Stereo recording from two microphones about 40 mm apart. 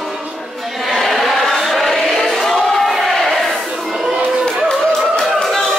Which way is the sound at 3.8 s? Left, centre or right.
Centre.